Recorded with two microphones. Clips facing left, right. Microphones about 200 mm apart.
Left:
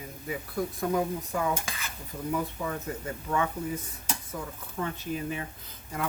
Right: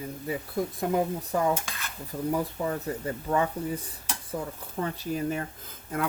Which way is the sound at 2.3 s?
35° right (ahead or behind).